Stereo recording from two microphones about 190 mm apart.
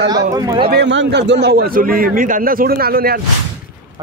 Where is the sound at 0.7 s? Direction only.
65° right (ahead or behind).